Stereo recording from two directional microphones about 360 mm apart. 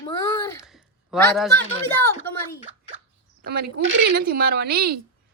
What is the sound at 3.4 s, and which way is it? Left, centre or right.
A woman's voice, right.